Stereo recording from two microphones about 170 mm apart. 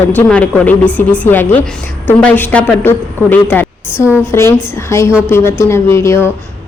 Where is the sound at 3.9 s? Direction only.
10° right (ahead or behind).